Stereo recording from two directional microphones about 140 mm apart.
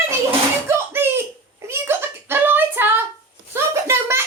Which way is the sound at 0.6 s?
15° right (ahead or behind).